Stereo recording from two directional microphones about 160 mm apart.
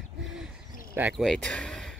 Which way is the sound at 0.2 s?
Centre (ahead or behind).